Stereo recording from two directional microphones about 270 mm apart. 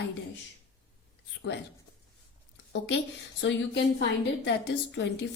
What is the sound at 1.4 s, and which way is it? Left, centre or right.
Speech, left.